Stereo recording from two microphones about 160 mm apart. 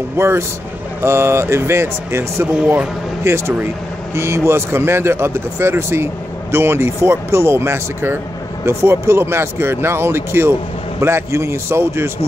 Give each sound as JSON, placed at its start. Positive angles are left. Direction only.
{"t": 0.2, "sound": "speech", "side_deg": -15}